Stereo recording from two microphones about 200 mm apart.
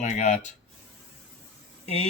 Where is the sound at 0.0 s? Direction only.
35° left (ahead or behind).